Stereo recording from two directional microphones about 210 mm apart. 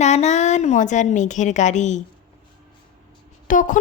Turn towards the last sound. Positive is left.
turn(degrees=40)  # may be behind; listen again after turning